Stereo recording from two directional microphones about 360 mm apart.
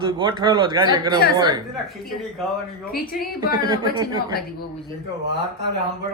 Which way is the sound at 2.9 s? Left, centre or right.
Left.